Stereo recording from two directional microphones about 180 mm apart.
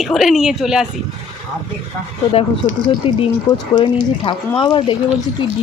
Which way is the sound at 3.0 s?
30° left (ahead or behind).